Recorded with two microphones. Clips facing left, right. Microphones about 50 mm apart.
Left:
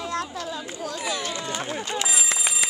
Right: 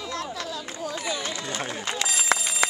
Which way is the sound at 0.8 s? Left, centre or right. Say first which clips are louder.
Even; centre.